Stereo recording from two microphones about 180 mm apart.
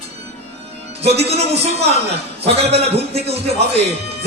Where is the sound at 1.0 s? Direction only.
35° right (ahead or behind).